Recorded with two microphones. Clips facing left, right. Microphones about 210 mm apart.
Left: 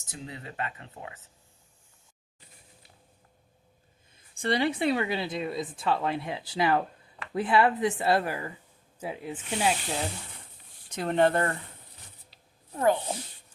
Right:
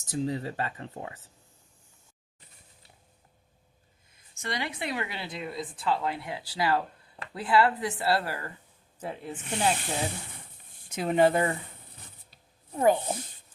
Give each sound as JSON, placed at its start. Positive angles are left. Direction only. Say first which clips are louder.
{"t": 0.1, "sound": "speech", "louder": "right 11 dB", "side_deg": -35}
{"t": 4.1, "sound": "speech", "louder": "left 7 dB", "side_deg": 30}
{"t": 12.7, "sound": "speech", "louder": "right 2 dB", "side_deg": -15}